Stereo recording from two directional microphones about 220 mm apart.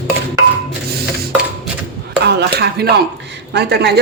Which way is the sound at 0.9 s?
45° right (ahead or behind).